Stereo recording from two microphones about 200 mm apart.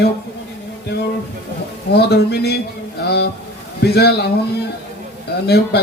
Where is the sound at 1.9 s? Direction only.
55° left (ahead or behind).